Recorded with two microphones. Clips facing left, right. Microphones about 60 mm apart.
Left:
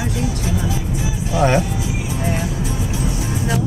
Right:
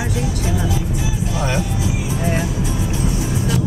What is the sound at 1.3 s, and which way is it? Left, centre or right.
Speech, left.